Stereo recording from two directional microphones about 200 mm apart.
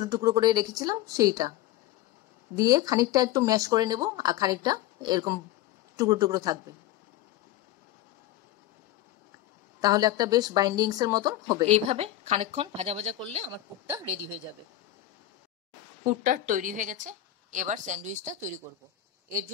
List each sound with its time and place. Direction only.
0.0 s speech: 15° right (ahead or behind)
2.5 s speech: 20° right (ahead or behind)
9.8 s speech: 20° right (ahead or behind)
11.6 s a woman's voice: 35° right (ahead or behind)
16.2 s a woman's voice: 40° right (ahead or behind)